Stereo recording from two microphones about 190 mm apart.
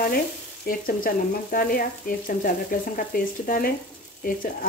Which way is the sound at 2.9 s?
50° left (ahead or behind).